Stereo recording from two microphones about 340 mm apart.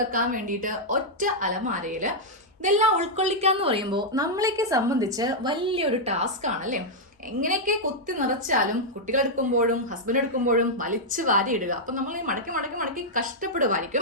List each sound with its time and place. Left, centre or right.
0.1 s a woman's voice: right